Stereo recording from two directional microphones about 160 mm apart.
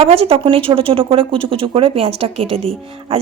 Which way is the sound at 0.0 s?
35° right (ahead or behind).